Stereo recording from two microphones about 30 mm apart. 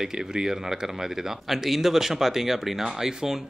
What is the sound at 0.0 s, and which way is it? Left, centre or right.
Speech, right.